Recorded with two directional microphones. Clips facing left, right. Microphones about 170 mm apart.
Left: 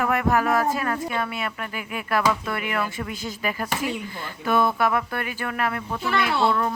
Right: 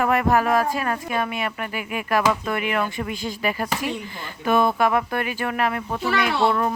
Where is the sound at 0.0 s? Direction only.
30° right (ahead or behind).